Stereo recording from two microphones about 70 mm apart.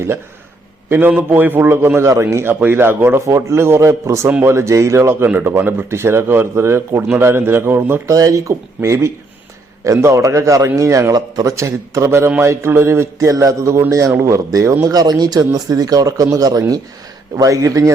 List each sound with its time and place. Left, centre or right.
0.9 s a man's voice: right
5.2 s speech: right
8.0 s speech: right
14.9 s speech: right
17.3 s speech: right